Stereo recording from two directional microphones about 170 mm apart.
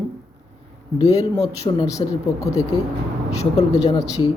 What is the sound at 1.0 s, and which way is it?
Speech, 20° left (ahead or behind).